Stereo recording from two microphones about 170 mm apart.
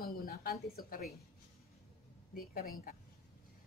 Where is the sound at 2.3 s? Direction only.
60° left (ahead or behind).